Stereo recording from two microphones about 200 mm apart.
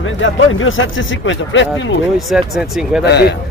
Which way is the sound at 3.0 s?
55° left (ahead or behind).